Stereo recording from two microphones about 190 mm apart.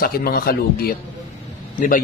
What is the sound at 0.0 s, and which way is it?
Speech, 50° left (ahead or behind).